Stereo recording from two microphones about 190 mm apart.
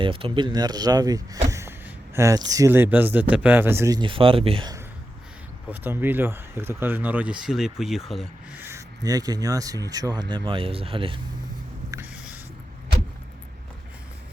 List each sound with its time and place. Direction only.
0.0 s speech: 25° right (ahead or behind)
1.5 s a sound: 15° right (ahead or behind)
2.1 s speech: 15° right (ahead or behind)
5.8 s speech: 10° right (ahead or behind); by 11.2 s 30° right (ahead or behind)
11.9 s writing: 10° right (ahead or behind)